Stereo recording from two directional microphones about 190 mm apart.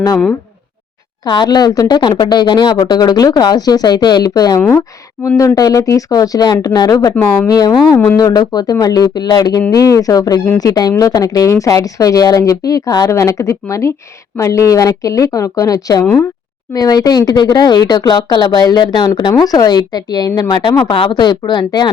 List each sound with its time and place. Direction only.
1.2 s a woman's voice: 20° left (ahead or behind)
7.9 s a woman's voice: 10° left (ahead or behind)
8.2 s a woman's voice: 20° left (ahead or behind)